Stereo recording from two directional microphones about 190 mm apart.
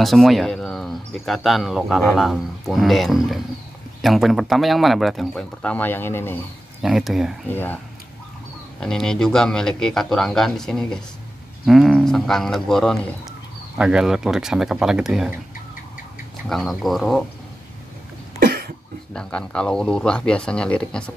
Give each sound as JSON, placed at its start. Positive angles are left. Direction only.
{"t": 0.0, "sound": "speech", "side_deg": 0}
{"t": 6.8, "sound": "speech", "side_deg": 0}
{"t": 7.4, "sound": "speech", "side_deg": 10}
{"t": 16.4, "sound": "speech", "side_deg": 0}
{"t": 18.4, "sound": "cough", "side_deg": -60}
{"t": 19.1, "sound": "speech", "side_deg": 5}